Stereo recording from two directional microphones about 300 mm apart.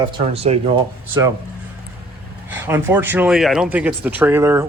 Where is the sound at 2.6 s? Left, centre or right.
Centre.